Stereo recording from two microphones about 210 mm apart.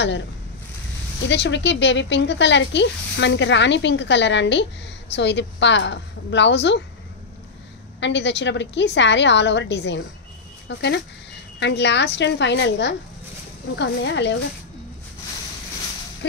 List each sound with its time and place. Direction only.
1.2 s speech: 55° left (ahead or behind)
8.0 s speech: 55° left (ahead or behind)